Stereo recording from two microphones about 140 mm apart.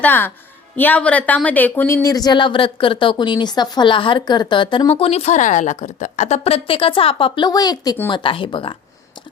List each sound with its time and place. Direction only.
0.0 s a woman's voice: 15° left (ahead or behind); by 8.7 s 40° left (ahead or behind)